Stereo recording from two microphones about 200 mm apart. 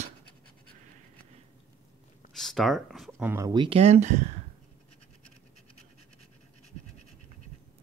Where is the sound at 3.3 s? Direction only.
20° right (ahead or behind); by 4.2 s 35° right (ahead or behind).